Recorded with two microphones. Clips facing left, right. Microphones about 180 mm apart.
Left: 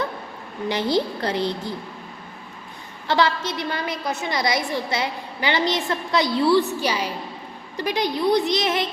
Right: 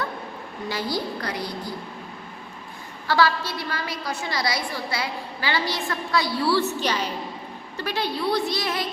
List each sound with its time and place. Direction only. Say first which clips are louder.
0.7 s a woman's voice: left 6 dB; 20° left (ahead or behind)
3.1 s a woman's voice: left 1 dB; 20° left (ahead or behind)
6.7 s a woman's voice: left 1 dB; 10° left (ahead or behind)